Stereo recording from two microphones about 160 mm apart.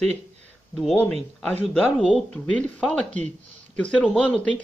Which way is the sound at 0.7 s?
5° left (ahead or behind).